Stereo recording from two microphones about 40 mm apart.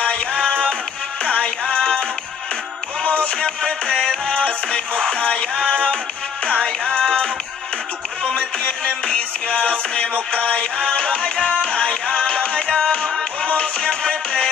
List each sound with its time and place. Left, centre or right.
0.0 s music: left
1.8 s music: left
3.0 s music: left